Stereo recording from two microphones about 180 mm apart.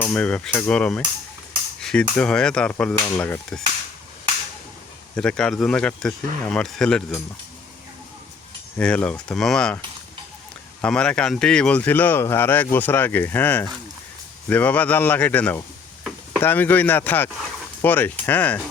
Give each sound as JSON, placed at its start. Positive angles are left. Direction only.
{"t": 0.0, "sound": "speech", "side_deg": 5}
{"t": 5.1, "sound": "speech", "side_deg": 5}
{"t": 8.8, "sound": "speech", "side_deg": 5}